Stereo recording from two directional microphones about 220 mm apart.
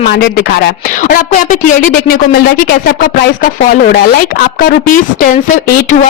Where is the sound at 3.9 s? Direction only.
45° left (ahead or behind).